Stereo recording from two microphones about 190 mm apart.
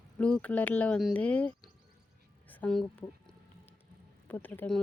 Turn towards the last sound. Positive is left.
turn(degrees=10)  # may be behind; listen again after turning